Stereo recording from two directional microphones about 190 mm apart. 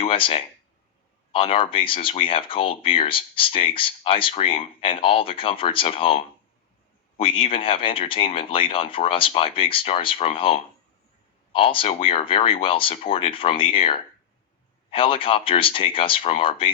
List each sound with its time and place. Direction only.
0.0 s speech: 30° left (ahead or behind)